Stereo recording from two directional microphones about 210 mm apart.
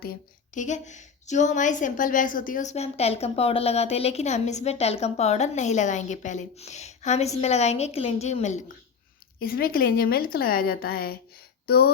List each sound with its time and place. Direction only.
0.0 s a woman's voice: 40° left (ahead or behind)
9.4 s a woman's voice: 45° left (ahead or behind)